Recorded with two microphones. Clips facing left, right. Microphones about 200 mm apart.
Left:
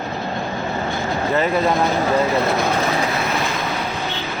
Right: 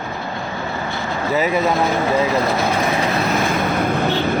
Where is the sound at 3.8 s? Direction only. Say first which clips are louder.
Right 7 dB; 55° right (ahead or behind).